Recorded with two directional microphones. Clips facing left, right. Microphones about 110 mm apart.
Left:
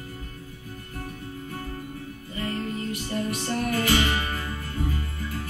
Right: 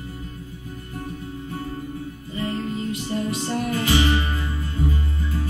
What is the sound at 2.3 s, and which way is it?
Music, 20° right (ahead or behind).